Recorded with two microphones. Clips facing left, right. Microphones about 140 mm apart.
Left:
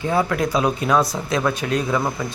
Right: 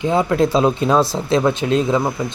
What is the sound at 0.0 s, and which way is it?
Speech, 20° right (ahead or behind).